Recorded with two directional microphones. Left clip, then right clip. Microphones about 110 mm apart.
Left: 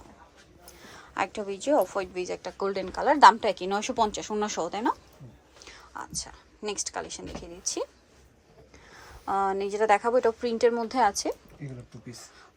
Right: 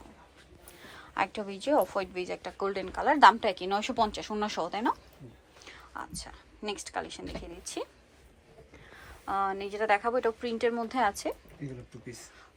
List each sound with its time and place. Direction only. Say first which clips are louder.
0.7 s a woman's voice: left 1 dB; 35° left (ahead or behind)
5.5 s whispering: left 2 dB; 35° left (ahead or behind)
6.0 s a woman's voice: left 4 dB; 30° left (ahead or behind)
8.9 s a woman's voice: left 4 dB; 50° left (ahead or behind)